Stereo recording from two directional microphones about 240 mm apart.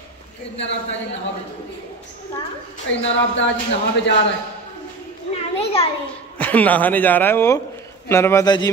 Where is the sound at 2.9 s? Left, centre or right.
Left.